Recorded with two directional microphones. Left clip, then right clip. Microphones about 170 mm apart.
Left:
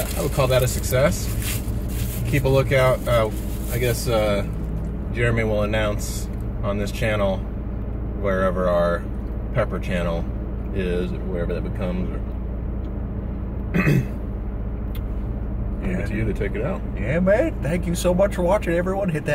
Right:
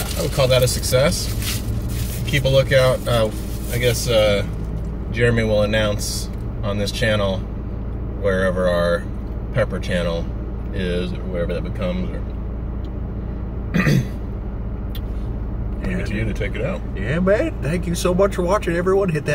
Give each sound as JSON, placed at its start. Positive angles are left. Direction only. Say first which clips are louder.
{"t": 0.4, "sound": "speech", "louder": "right 4 dB", "side_deg": -15}
{"t": 2.3, "sound": "speech", "louder": "right 3 dB", "side_deg": -10}
{"t": 16.4, "sound": "speech", "louder": "right 2 dB", "side_deg": -10}
{"t": 17.1, "sound": "speech", "louder": "even", "side_deg": 15}